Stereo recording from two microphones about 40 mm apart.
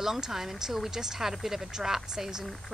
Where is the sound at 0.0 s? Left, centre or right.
Centre.